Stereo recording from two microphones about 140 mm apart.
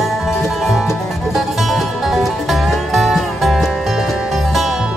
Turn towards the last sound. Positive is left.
turn(degrees=0)  # may be behind; listen again after turning